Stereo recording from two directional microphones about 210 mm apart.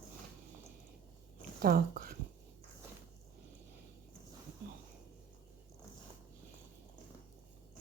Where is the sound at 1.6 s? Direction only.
45° right (ahead or behind).